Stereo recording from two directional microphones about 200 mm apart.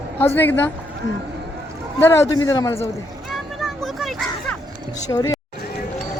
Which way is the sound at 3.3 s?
Centre (ahead or behind).